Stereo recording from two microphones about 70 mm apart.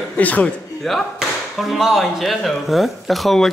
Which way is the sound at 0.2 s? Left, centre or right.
Left.